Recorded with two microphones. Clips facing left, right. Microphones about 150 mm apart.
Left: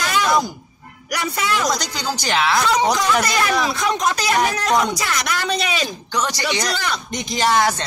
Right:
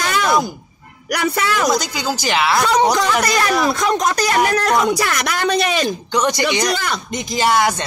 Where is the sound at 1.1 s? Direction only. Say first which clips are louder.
Right 5 dB; 55° right (ahead or behind).